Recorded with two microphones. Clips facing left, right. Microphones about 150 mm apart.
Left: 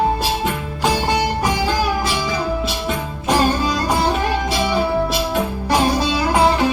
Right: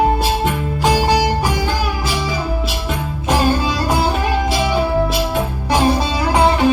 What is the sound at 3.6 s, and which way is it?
Music, centre (ahead or behind).